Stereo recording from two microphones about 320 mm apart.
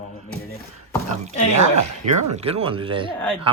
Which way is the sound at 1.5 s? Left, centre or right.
Right.